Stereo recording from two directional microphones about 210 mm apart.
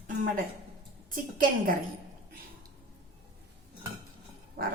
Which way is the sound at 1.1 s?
40° right (ahead or behind).